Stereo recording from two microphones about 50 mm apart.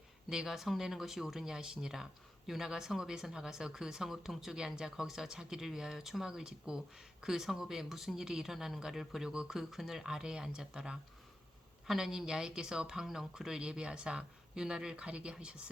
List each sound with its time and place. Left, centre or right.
0.3 s speech: centre